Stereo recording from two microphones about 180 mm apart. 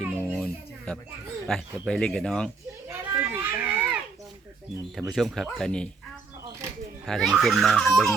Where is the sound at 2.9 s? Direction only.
10° right (ahead or behind).